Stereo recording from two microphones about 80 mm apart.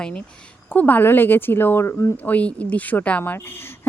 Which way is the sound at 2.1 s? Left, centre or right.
Left.